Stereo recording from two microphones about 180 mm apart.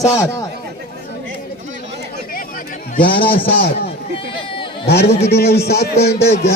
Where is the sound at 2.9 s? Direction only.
55° left (ahead or behind).